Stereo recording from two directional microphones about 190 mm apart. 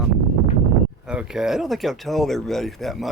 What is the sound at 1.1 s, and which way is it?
A man's voice, 5° right (ahead or behind).